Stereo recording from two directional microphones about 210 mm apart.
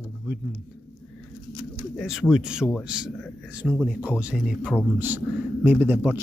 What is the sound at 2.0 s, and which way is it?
A man's voice, centre (ahead or behind).